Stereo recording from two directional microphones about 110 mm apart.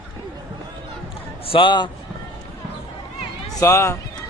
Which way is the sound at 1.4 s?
50° left (ahead or behind).